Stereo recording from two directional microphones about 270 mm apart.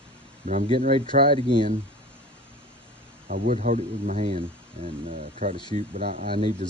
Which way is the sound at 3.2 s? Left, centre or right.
Right.